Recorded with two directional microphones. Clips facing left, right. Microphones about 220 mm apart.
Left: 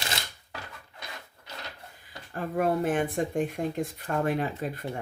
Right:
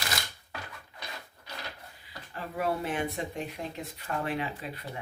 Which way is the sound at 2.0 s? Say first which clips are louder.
Left 6 dB; 50° left (ahead or behind).